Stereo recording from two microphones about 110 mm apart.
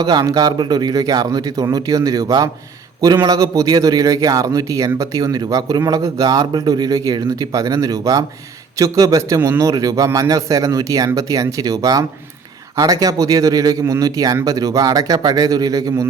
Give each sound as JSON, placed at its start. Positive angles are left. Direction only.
{"t": 0.0, "sound": "a man's voice", "side_deg": -35}